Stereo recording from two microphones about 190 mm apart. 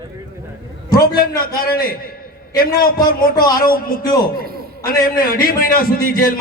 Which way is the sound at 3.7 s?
50° left (ahead or behind).